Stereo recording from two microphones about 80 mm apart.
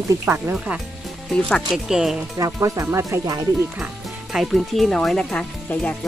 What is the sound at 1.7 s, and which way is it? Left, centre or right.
Speech, centre.